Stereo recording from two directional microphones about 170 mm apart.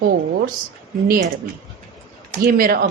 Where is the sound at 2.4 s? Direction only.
55° right (ahead or behind).